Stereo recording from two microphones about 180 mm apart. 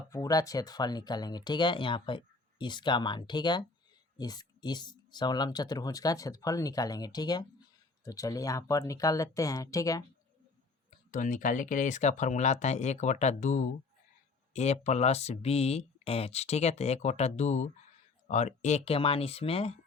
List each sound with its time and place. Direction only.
0.1 s speech: 20° left (ahead or behind)
11.1 s speech: 45° left (ahead or behind)